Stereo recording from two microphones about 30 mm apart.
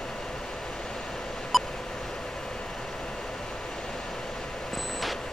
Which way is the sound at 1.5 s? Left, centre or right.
Centre.